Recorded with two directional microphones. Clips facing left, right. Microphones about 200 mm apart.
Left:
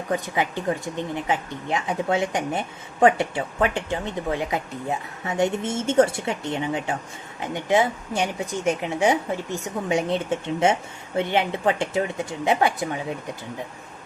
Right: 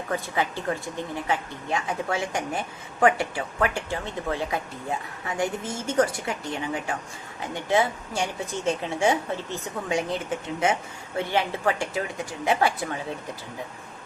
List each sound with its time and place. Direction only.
0.1 s a woman's voice: 15° left (ahead or behind)
10.1 s speech: 25° left (ahead or behind)